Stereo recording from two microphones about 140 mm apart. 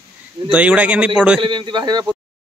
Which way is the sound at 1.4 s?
35° right (ahead or behind).